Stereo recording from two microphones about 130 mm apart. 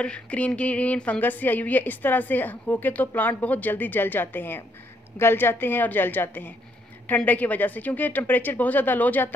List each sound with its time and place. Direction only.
0.0 s a woman's voice: 10° left (ahead or behind)